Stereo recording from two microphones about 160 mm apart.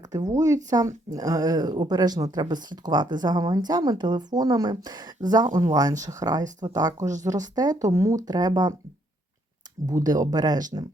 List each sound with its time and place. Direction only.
0.1 s speech: 20° right (ahead or behind)
9.8 s speech: 25° right (ahead or behind)